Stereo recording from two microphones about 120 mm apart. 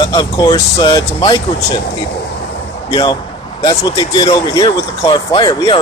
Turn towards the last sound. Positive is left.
turn(degrees=40)  # may be behind; listen again after turning